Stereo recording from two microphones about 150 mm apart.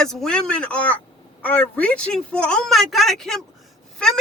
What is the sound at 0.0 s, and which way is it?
Speech, centre (ahead or behind).